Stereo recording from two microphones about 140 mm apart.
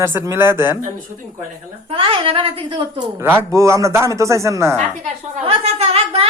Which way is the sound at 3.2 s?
15° right (ahead or behind).